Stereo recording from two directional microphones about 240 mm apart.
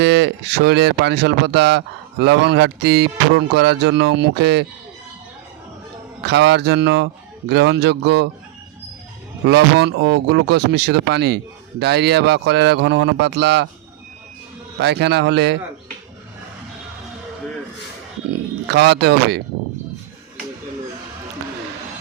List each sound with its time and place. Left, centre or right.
0.0 s speech: right
6.2 s speech: right
9.5 s speech: right
14.8 s speech: right
18.7 s speech: right